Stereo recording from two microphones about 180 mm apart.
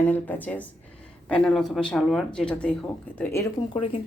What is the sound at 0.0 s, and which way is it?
Speech, 10° left (ahead or behind).